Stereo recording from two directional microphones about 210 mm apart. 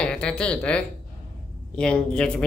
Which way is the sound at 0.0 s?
5° left (ahead or behind).